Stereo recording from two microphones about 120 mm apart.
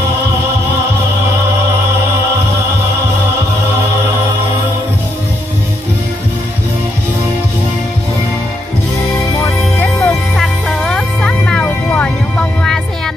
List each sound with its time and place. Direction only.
9.1 s music: 20° left (ahead or behind)
9.9 s music: 5° left (ahead or behind)